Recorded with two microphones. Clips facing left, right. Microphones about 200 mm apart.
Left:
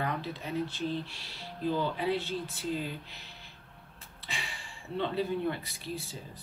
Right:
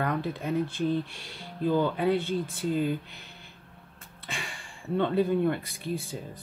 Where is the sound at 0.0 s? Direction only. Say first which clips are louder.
Right 5 dB; 50° right (ahead or behind).